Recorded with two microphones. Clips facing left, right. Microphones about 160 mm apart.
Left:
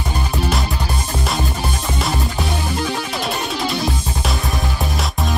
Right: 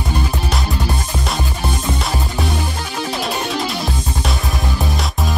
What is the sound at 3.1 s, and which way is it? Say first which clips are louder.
Music: right 2 dB; centre (ahead or behind).